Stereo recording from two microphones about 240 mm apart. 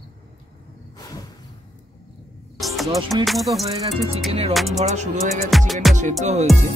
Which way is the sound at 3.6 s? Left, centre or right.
Centre.